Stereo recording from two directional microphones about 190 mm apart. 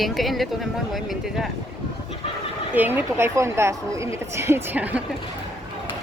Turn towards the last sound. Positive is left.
turn(degrees=-10)  # may be behind; listen again after turning